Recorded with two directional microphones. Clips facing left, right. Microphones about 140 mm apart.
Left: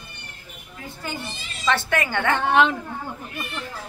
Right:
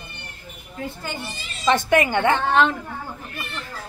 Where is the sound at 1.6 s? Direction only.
20° right (ahead or behind).